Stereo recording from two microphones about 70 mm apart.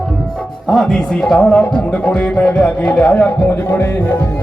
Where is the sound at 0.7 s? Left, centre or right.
Centre.